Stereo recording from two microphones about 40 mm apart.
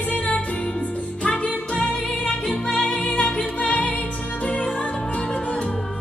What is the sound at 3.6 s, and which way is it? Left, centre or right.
Music, left.